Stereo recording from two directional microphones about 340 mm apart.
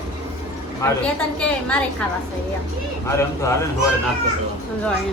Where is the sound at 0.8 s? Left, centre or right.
Centre.